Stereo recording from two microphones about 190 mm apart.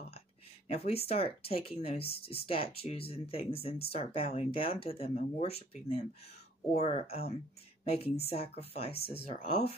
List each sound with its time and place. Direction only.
0.7 s speech: 30° left (ahead or behind)
6.8 s speech: 30° left (ahead or behind)